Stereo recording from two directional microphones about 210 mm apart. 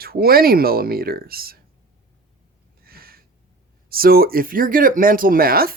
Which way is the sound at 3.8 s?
45° right (ahead or behind).